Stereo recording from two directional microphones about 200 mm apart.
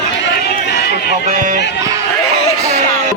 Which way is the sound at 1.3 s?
40° right (ahead or behind).